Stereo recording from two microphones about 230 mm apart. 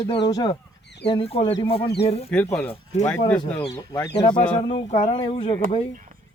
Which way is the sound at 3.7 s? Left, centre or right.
Centre.